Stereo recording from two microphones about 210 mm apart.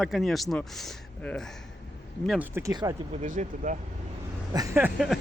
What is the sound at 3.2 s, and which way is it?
Speech, 40° right (ahead or behind).